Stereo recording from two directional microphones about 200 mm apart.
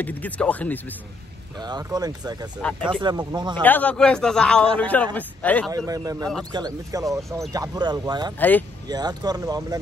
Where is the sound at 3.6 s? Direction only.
10° left (ahead or behind).